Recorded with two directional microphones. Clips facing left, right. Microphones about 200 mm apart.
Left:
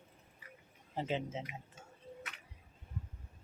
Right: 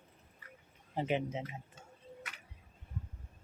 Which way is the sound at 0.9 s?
15° right (ahead or behind).